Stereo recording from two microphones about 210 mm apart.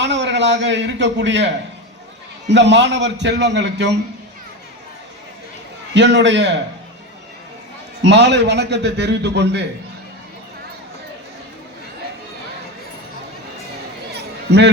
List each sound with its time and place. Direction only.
0.0 s a man's voice: 55° right (ahead or behind)
5.9 s a man's voice: 55° right (ahead or behind)
8.0 s a man's voice: 55° right (ahead or behind)
14.5 s a man's voice: 50° right (ahead or behind)